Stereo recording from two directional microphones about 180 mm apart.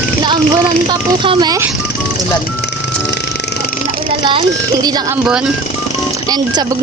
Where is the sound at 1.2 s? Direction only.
20° right (ahead or behind).